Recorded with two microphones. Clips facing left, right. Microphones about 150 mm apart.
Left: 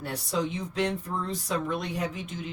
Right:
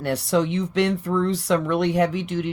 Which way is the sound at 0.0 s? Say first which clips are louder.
Right 8 dB; 80° right.